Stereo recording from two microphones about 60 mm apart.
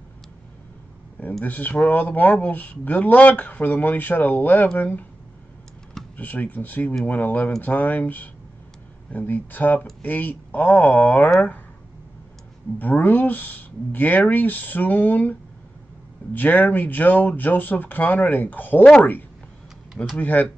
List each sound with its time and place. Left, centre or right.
1.4 s speech: left
6.1 s speech: left
12.7 s speech: left
16.3 s speech: left
20.2 s speech: left